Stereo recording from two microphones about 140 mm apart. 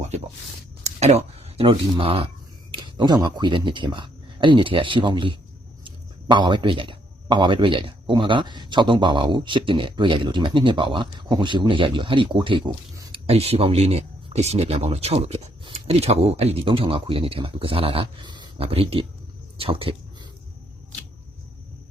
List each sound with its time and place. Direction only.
0.9 s speech: 50° right (ahead or behind); by 13.1 s 35° right (ahead or behind)
13.2 s speech: 45° right (ahead or behind)